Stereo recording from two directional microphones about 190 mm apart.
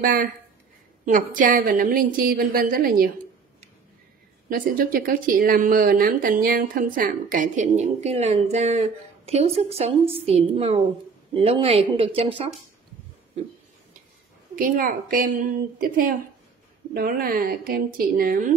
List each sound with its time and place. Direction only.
0.0 s speech: 45° right (ahead or behind)
4.5 s speech: 50° right (ahead or behind); by 12.4 s 30° right (ahead or behind)
14.5 s speech: 45° right (ahead or behind)